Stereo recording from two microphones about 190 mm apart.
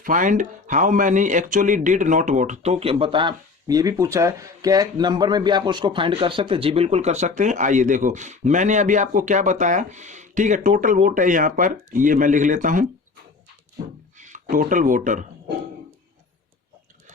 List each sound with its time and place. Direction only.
0.0 s speech: 45° right (ahead or behind)
14.2 s speech: 40° right (ahead or behind)